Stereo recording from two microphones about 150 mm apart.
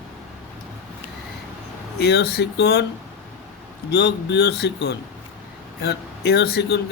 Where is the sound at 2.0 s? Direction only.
90° left.